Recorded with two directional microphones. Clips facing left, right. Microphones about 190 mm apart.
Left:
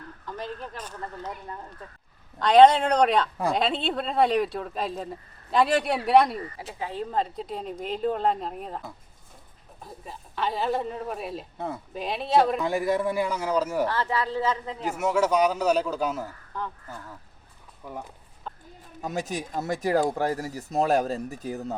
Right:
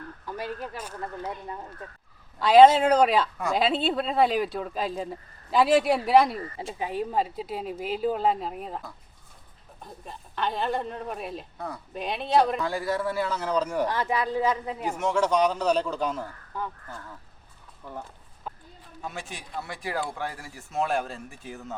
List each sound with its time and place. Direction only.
0.3 s speech: 10° right (ahead or behind)
2.4 s speech: 5° right (ahead or behind)
6.6 s speech: 20° right (ahead or behind); by 8.8 s centre (ahead or behind)
9.8 s speech: centre (ahead or behind)
11.5 s speech: 20° left (ahead or behind)
11.9 s speech: centre (ahead or behind)
12.6 s a man's voice: 20° left (ahead or behind)
13.8 s speech: 15° right (ahead or behind)
14.8 s a man's voice: 10° left (ahead or behind)
17.8 s a man's voice: 10° left (ahead or behind)
18.5 s a sound: 5° right (ahead or behind)
19.0 s speech: 40° left (ahead or behind)